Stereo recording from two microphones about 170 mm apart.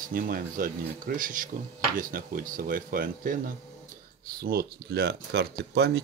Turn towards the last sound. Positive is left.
turn(degrees=-80)